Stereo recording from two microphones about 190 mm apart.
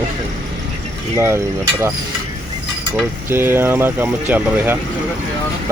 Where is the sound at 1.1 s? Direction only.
15° right (ahead or behind).